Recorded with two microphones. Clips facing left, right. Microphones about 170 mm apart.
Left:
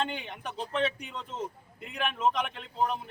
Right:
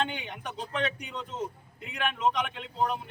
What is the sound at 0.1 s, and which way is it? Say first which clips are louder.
A man's voice: even; centre (ahead or behind).